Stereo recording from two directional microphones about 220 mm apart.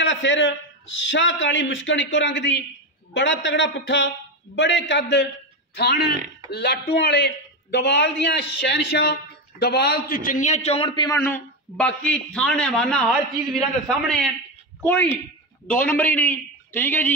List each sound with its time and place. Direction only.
0.0 s a man's voice: 55° left (ahead or behind); by 17.1 s 10° left (ahead or behind)